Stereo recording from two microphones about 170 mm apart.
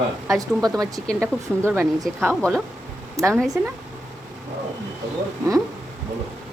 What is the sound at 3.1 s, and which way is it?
Speech, 15° right (ahead or behind).